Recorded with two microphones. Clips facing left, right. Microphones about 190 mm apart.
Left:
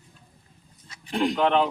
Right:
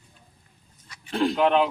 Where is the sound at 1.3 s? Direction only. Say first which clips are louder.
Right 1 dB; 10° right (ahead or behind).